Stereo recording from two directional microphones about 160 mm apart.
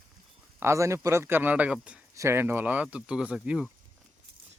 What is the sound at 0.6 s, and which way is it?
A man's voice, 20° right (ahead or behind).